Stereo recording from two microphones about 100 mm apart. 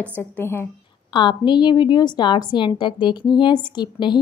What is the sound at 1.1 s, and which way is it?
A woman's voice, 50° left (ahead or behind).